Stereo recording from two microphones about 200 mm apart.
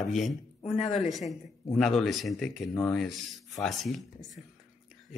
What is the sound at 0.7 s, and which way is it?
Speech, 35° left (ahead or behind).